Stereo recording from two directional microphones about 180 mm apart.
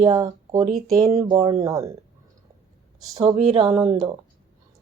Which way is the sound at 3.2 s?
30° right (ahead or behind).